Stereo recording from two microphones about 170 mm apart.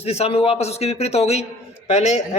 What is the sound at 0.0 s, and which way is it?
A man's voice, 35° left (ahead or behind).